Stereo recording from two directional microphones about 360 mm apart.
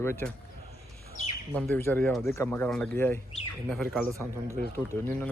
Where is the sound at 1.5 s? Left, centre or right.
Centre.